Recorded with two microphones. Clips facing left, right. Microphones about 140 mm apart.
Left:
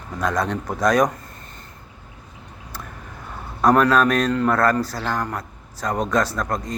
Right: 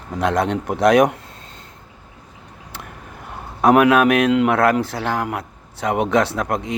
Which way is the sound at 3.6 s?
60° right (ahead or behind).